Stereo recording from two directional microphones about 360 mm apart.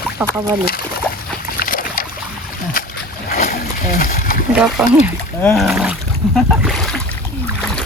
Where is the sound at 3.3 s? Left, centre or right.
Left.